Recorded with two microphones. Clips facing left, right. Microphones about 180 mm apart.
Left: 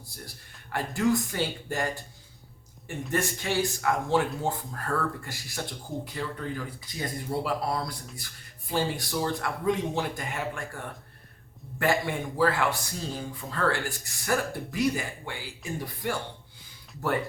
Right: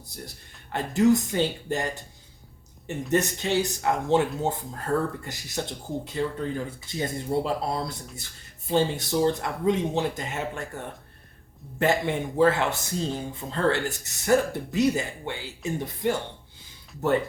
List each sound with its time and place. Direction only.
0.7 s a man's voice: 20° right (ahead or behind)